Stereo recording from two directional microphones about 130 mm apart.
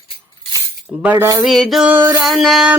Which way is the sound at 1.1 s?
30° right (ahead or behind).